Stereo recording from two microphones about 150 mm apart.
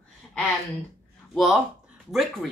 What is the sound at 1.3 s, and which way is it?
A woman's voice, centre (ahead or behind).